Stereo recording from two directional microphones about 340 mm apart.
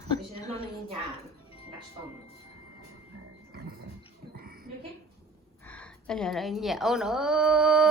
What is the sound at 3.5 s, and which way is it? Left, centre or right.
Dog, right.